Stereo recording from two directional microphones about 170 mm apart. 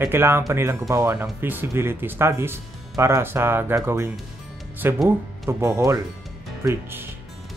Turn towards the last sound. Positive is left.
turn(degrees=-15)  # may be behind; listen again after turning